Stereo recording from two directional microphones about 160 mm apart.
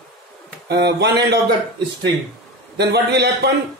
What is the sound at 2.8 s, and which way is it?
Speech, 90° right.